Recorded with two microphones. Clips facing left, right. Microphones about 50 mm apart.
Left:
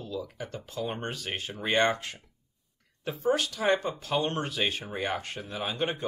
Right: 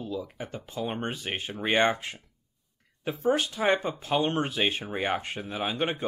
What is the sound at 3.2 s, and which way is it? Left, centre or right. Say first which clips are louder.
Speech: right 1 dB; right.